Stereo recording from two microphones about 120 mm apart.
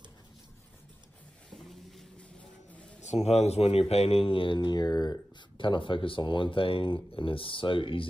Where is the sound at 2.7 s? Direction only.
10° left (ahead or behind).